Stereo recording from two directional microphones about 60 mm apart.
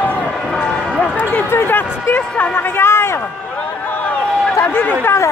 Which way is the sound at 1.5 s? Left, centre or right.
Left.